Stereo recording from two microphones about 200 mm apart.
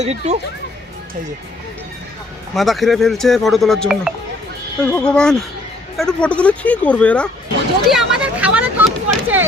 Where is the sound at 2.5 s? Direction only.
Centre (ahead or behind).